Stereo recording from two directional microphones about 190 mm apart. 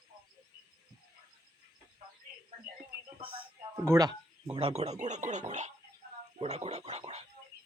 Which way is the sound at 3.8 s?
15° right (ahead or behind).